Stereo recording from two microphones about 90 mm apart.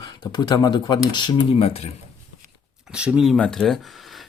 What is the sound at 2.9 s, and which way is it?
Speech, 10° right (ahead or behind).